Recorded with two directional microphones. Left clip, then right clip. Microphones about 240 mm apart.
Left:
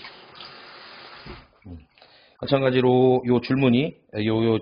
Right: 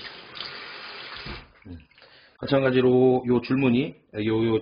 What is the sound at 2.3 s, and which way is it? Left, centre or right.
A man's voice, left.